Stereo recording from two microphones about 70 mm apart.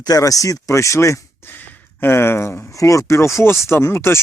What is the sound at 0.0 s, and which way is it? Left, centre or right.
Speech, left.